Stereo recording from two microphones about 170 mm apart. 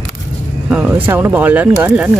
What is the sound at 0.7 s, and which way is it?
Speech, 10° right (ahead or behind).